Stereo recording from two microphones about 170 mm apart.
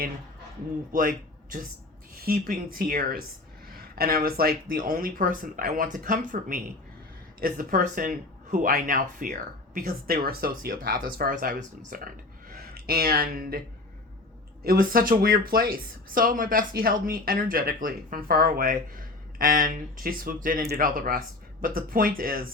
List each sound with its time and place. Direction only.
0.9 s speech: 55° right (ahead or behind)
14.6 s speech: 60° right (ahead or behind)